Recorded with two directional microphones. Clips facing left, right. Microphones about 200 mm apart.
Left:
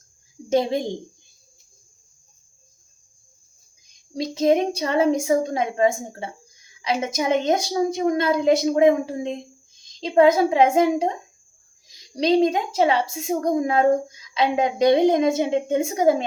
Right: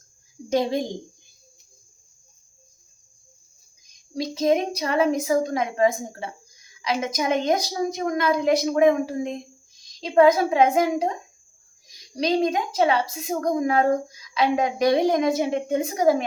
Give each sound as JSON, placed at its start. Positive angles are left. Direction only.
{"t": 4.1, "sound": "a woman's voice", "side_deg": 25}